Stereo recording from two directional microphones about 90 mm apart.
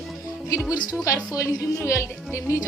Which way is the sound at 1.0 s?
35° left (ahead or behind).